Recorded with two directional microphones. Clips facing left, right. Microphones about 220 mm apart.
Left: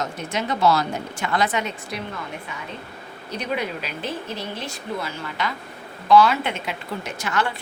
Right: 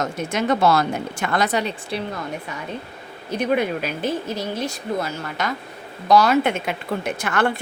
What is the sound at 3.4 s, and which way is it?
Speech, 50° right (ahead or behind).